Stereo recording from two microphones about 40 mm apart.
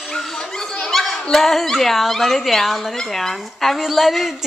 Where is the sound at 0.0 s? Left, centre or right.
Centre.